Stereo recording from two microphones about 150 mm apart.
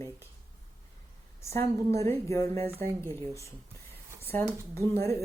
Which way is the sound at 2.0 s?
20° left (ahead or behind).